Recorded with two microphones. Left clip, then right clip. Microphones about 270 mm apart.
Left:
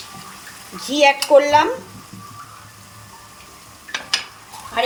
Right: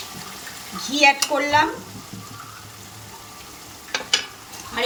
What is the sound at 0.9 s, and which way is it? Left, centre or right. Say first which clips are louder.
Speech: left 5 dB; left.